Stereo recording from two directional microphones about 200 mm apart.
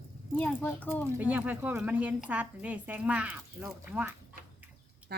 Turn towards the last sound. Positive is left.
turn(degrees=-10)  # may be behind; listen again after turning